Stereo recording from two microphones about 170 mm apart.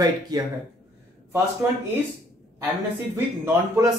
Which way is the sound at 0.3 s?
20° right (ahead or behind).